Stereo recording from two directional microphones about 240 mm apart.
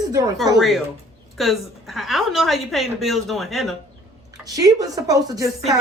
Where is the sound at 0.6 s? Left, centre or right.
Centre.